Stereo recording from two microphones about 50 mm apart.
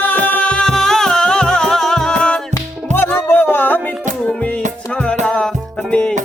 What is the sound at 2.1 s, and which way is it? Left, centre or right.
Music, centre.